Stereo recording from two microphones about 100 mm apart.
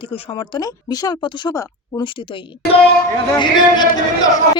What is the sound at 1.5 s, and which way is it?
Speech, 30° left (ahead or behind).